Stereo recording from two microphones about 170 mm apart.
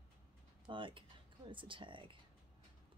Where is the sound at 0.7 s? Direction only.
30° right (ahead or behind).